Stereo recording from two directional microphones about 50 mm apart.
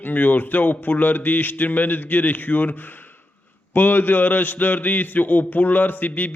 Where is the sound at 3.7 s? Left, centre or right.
Left.